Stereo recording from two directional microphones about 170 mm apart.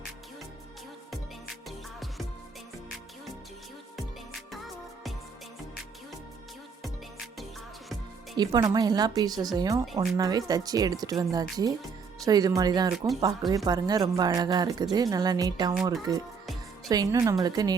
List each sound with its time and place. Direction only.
1.6 s music: centre (ahead or behind)
4.4 s music: centre (ahead or behind)
8.4 s speech: 25° right (ahead or behind)